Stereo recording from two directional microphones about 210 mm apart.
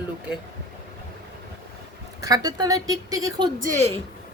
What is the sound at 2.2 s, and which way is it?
A woman's voice, 15° right (ahead or behind).